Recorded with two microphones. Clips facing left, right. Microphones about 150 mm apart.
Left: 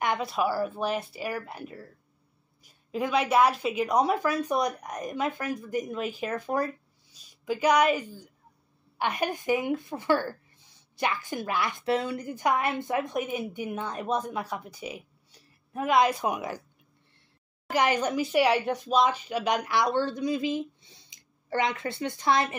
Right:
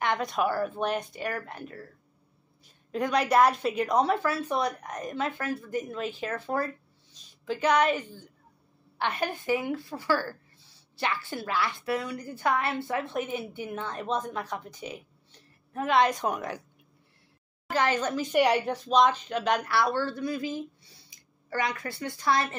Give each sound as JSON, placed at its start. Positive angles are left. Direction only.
{"t": 0.0, "sound": "a woman's voice", "side_deg": 5}
{"t": 17.6, "sound": "a woman's voice", "side_deg": 15}